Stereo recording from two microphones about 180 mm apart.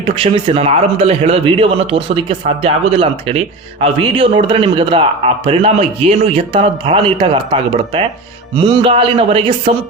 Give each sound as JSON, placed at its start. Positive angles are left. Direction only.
{"t": 0.0, "sound": "a man's voice", "side_deg": -30}